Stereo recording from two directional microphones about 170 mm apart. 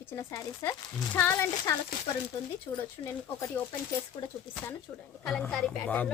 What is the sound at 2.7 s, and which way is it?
Speech, 30° left (ahead or behind).